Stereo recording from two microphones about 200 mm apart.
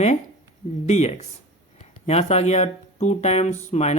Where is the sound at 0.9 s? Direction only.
35° left (ahead or behind).